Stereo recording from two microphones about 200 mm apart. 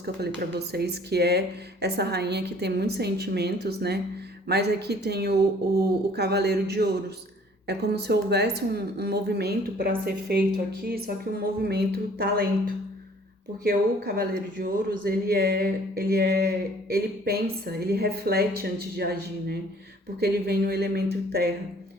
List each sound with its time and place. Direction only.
0.7 s a woman's voice: 55° right (ahead or behind)
13.7 s speech: 50° right (ahead or behind)